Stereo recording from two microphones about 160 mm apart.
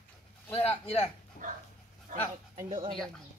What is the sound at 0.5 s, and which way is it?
Speech, 40° left (ahead or behind).